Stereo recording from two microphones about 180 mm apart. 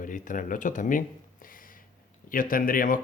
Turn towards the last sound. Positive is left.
turn(degrees=50)  # may be behind; listen again after turning